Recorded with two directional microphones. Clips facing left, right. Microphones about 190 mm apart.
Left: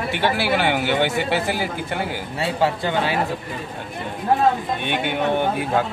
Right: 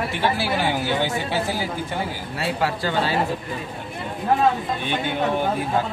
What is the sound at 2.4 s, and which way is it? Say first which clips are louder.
Speech: left 3 dB; 25° left (ahead or behind).